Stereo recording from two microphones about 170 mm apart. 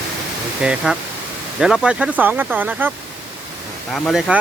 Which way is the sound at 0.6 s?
5° right (ahead or behind).